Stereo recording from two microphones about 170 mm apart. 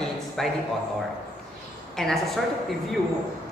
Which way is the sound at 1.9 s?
Centre (ahead or behind).